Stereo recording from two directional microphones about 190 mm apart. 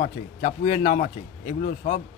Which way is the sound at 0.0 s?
40° left (ahead or behind).